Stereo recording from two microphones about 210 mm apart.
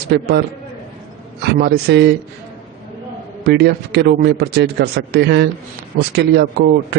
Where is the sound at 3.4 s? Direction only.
50° right (ahead or behind).